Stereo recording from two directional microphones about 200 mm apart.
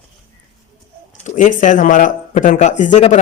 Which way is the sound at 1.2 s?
40° left (ahead or behind).